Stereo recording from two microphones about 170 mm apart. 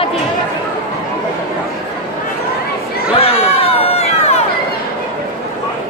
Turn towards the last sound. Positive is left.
turn(degrees=40)  # may be behind; listen again after turning